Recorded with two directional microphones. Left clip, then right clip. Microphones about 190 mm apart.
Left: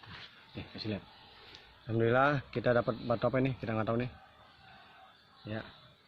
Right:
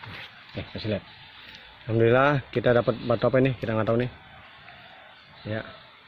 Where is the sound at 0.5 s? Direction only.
30° right (ahead or behind).